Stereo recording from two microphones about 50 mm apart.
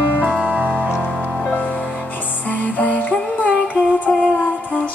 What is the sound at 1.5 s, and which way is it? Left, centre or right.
Music, left.